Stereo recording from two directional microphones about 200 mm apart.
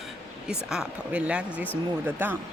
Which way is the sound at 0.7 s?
5° right (ahead or behind).